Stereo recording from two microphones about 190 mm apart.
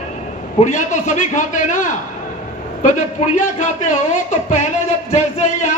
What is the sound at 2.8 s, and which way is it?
A man's voice, 40° left (ahead or behind).